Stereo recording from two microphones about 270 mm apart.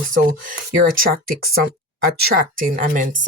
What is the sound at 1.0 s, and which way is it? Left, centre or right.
Speech, right.